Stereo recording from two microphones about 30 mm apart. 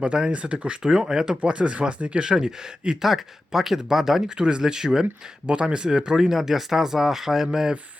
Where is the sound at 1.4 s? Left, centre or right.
Right.